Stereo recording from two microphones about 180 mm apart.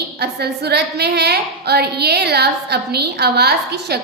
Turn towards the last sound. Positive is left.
turn(degrees=-65)  # may be behind; listen again after turning